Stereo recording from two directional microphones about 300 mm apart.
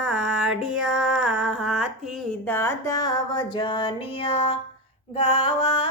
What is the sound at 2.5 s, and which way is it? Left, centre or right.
Music, centre.